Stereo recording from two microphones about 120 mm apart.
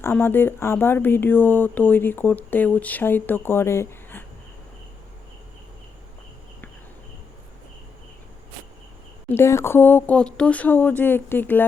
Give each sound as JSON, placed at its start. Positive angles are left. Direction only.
{"t": 0.0, "sound": "speech", "side_deg": 15}
{"t": 9.3, "sound": "speech", "side_deg": 20}